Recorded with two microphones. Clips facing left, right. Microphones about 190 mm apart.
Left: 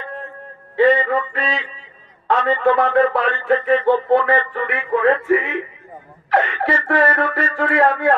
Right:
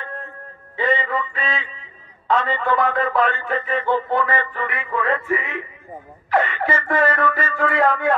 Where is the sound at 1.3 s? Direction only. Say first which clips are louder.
Left 3 dB; 70° left (ahead or behind).